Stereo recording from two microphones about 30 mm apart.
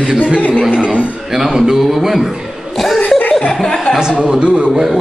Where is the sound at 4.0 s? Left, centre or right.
Right.